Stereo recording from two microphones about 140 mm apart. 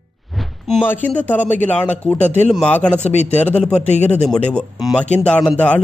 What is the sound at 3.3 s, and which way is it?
Speech, 10° left (ahead or behind).